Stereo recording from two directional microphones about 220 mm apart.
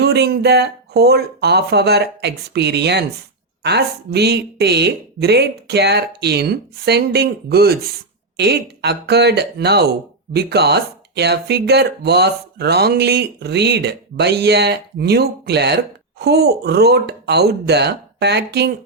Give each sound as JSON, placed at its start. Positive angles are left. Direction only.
{"t": 0.0, "sound": "speech", "side_deg": -50}